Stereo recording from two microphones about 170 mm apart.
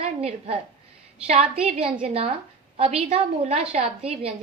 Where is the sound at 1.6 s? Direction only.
35° right (ahead or behind).